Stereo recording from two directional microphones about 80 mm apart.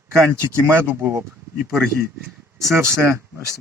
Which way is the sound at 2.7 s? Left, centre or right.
Right.